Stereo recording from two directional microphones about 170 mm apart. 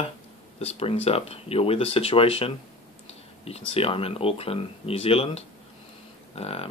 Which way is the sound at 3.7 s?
35° left (ahead or behind).